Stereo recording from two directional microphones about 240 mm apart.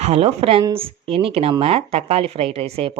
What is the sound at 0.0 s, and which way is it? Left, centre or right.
Speech, right.